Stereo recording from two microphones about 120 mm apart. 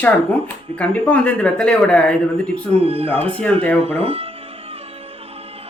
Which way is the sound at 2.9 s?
50° right (ahead or behind).